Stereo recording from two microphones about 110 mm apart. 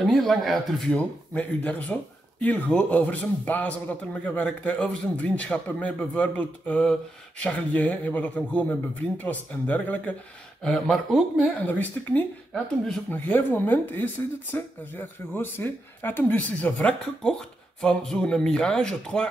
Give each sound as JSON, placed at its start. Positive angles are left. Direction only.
{"t": 0.0, "sound": "a man's voice", "side_deg": 0}
{"t": 10.6, "sound": "speech", "side_deg": 5}
{"t": 11.6, "sound": "a man's voice", "side_deg": 15}
{"t": 13.2, "sound": "a man's voice", "side_deg": 20}